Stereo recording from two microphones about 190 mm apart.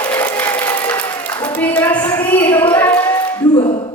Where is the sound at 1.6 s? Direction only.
10° left (ahead or behind).